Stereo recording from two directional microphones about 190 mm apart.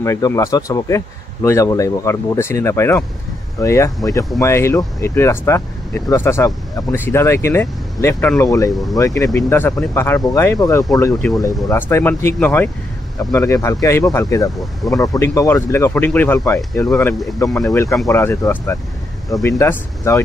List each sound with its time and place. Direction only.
0.0 s speech: 15° left (ahead or behind)